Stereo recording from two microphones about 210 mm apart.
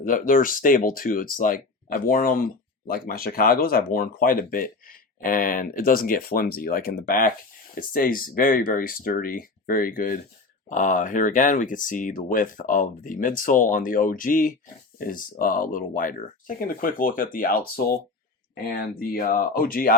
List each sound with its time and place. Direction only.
0.0 s speech: 40° left (ahead or behind)